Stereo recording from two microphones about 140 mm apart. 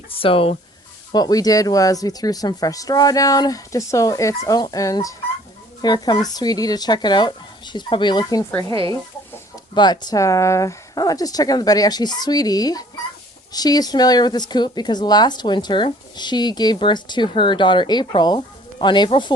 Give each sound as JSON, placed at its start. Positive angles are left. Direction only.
{"t": 0.1, "sound": "speech", "side_deg": 40}
{"t": 1.1, "sound": "speech", "side_deg": 30}
{"t": 9.7, "sound": "speech", "side_deg": 30}